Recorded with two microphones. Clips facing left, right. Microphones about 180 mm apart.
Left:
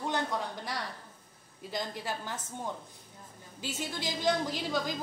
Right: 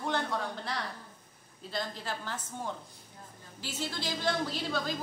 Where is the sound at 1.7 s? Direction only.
15° left (ahead or behind).